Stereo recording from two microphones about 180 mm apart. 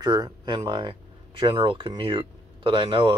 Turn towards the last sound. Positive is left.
turn(degrees=-30)  # may be behind; listen again after turning